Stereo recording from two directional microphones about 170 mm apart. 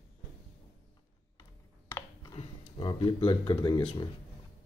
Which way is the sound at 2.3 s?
30° left (ahead or behind).